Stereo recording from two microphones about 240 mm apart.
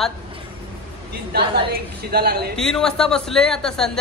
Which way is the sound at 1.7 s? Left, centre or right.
Right.